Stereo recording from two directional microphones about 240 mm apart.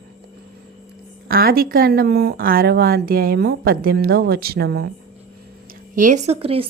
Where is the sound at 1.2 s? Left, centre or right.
Right.